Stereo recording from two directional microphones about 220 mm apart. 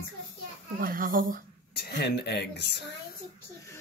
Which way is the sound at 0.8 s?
40° right (ahead or behind).